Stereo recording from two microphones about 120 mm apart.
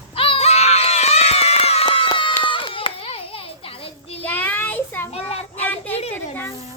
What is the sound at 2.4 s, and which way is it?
Hands, 45° left (ahead or behind).